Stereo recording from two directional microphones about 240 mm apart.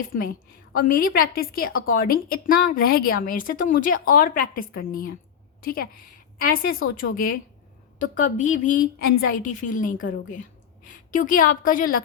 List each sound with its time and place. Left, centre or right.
0.8 s a woman's voice: left
11.1 s a woman's voice: left